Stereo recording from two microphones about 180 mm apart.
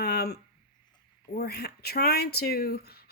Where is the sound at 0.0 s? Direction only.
60° left (ahead or behind).